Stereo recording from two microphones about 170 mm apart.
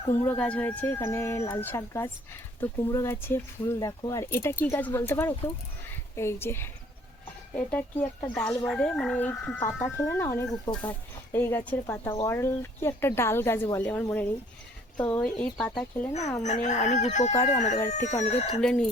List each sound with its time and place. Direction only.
0.1 s speech: 10° left (ahead or behind)
10.8 s speech: 10° left (ahead or behind)
16.4 s speech: 45° left (ahead or behind)
18.6 s speech: 5° left (ahead or behind)